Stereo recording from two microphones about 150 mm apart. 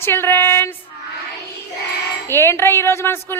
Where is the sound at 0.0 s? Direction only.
15° left (ahead or behind).